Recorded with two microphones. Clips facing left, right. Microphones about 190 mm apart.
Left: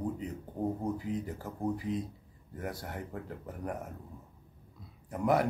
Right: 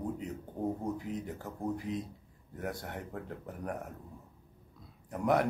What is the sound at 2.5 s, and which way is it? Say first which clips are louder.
Speech: even; 5° left (ahead or behind).